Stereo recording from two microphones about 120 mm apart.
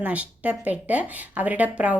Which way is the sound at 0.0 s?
10° right (ahead or behind).